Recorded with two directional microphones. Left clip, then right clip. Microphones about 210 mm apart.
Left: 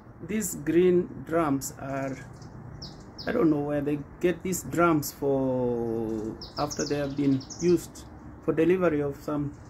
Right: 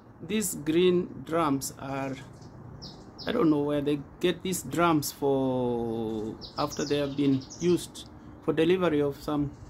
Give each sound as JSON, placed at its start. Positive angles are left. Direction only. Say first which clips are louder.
{"t": 0.3, "sound": "speech", "louder": "left 1 dB", "side_deg": -5}
{"t": 3.3, "sound": "speech", "louder": "even", "side_deg": -10}